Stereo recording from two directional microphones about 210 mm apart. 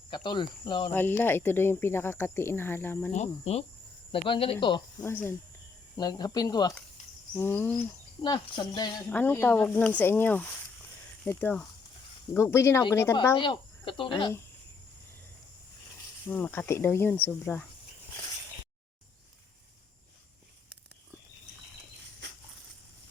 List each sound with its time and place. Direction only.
0.1 s speech: 20° left (ahead or behind)
0.9 s speech: 10° left (ahead or behind)
3.1 s speech: 30° left (ahead or behind); by 7.9 s 10° left (ahead or behind)
8.2 s speech: 20° left (ahead or behind)
9.0 s speech: 10° left (ahead or behind)
13.3 s speech: 25° left (ahead or behind)
16.2 s speech: 10° left (ahead or behind)